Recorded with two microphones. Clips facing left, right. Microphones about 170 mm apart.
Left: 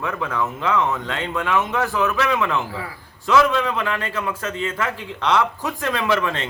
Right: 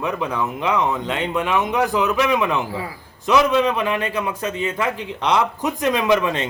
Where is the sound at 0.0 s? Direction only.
20° right (ahead or behind).